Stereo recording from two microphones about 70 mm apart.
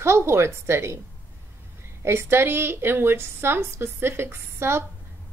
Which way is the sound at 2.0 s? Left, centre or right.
Right.